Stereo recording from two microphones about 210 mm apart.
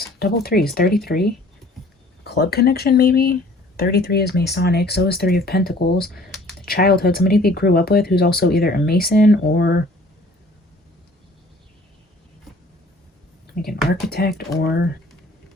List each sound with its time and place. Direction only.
0.2 s speech: 50° left (ahead or behind)
14.3 s speech: 50° left (ahead or behind)